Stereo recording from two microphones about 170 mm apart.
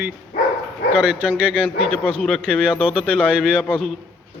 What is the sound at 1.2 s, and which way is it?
Speech, 5° left (ahead or behind).